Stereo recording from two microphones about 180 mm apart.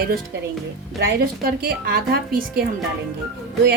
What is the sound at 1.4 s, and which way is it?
A woman's voice, 55° right (ahead or behind).